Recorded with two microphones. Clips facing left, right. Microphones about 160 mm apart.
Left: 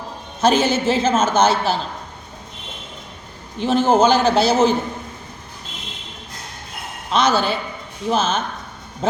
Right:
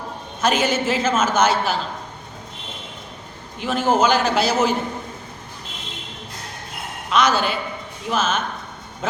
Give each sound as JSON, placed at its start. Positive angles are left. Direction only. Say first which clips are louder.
{"t": 0.4, "sound": "a man's voice", "louder": "left 3 dB", "side_deg": 30}
{"t": 3.6, "sound": "a man's voice", "louder": "left 4 dB", "side_deg": 30}
{"t": 7.1, "sound": "a man's voice", "louder": "left 1 dB", "side_deg": 30}